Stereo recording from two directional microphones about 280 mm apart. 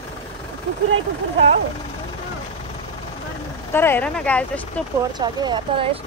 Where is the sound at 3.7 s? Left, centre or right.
Centre.